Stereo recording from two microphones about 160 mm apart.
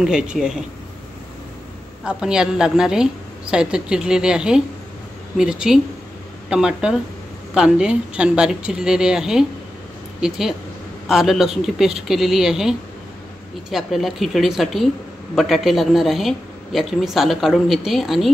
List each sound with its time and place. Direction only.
0.0 s speech: 5° right (ahead or behind)
2.0 s speech: 5° right (ahead or behind)